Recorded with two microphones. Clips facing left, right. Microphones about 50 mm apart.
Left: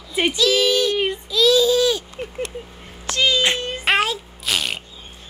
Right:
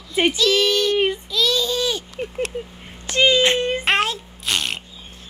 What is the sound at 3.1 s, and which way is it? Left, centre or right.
Speech, right.